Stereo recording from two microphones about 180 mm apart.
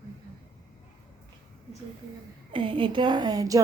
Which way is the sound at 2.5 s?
30° right (ahead or behind).